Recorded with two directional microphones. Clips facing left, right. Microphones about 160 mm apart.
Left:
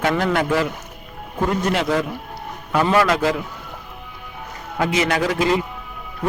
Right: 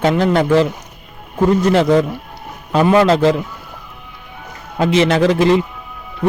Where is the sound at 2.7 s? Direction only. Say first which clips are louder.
Right 5 dB; 20° right (ahead or behind).